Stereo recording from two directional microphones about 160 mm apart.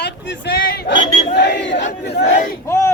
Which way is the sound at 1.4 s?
90° left.